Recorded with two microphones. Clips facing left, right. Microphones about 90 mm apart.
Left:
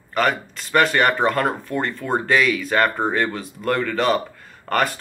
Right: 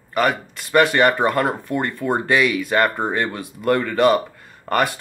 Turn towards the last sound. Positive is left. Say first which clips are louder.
# right 1 dB
turn(degrees=-15)  # may be behind; listen again after turning